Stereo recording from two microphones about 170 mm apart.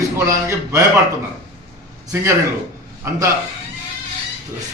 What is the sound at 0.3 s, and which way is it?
Speech, 20° right (ahead or behind).